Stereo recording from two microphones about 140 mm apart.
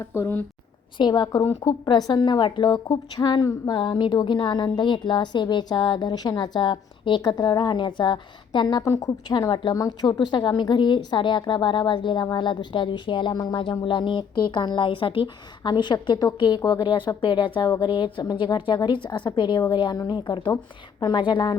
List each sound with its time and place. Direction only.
0.0 s a woman's voice: 20° left (ahead or behind)
0.9 s a woman's voice: 30° left (ahead or behind)